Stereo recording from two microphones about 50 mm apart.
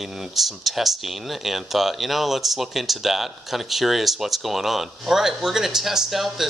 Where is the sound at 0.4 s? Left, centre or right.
Centre.